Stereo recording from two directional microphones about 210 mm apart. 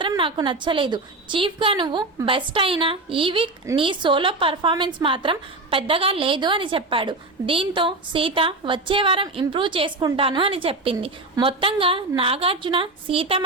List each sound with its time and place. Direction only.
0.0 s a woman's voice: 25° right (ahead or behind)